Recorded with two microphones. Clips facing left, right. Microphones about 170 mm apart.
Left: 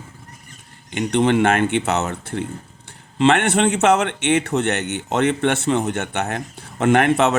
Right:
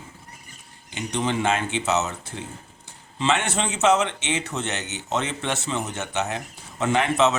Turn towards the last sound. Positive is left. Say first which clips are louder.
# left 5 dB
turn(degrees=55)  # may be behind; listen again after turning